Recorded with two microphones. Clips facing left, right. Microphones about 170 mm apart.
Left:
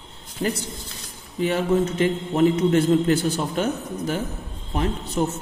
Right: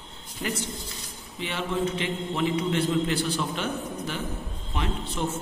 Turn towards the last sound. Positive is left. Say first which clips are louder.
# left 6 dB
turn(degrees=40)  # may be behind; listen again after turning